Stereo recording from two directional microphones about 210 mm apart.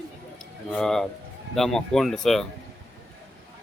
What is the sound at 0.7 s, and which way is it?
Speech, centre (ahead or behind).